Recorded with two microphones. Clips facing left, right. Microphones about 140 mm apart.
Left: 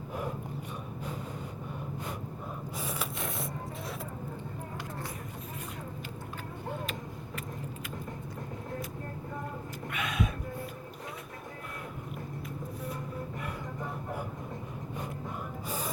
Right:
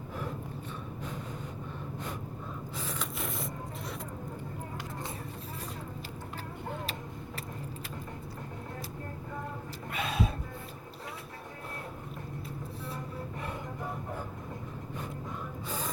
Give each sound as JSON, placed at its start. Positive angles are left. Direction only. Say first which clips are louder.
{"t": 2.7, "sound": "printer", "louder": "left 1 dB", "side_deg": 10}
{"t": 9.9, "sound": "music", "louder": "right 1 dB", "side_deg": -30}